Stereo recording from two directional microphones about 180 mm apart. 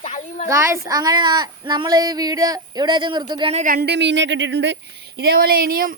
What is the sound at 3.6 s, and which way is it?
Speech, 55° right (ahead or behind).